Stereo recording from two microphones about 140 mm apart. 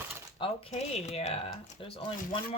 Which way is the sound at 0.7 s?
50° left (ahead or behind).